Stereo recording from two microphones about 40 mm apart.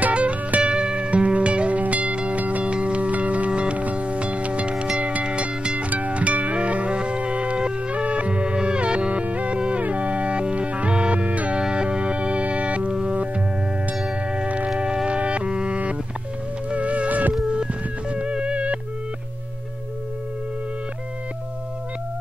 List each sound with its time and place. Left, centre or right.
0.1 s music: right
2.3 s music: right
2.6 s music: right
5.9 s music: right
11.5 s music: right
14.3 s music: right
18.1 s music: right